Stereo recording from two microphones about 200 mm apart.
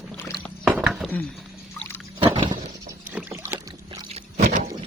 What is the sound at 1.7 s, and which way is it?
Boat, 10° left (ahead or behind).